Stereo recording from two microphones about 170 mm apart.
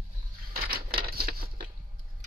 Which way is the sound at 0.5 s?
65° right (ahead or behind).